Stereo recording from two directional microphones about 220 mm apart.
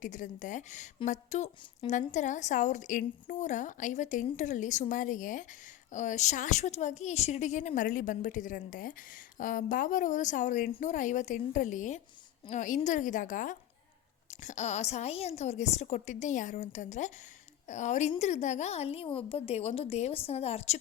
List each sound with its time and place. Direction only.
0.0 s a woman's voice: 35° left (ahead or behind)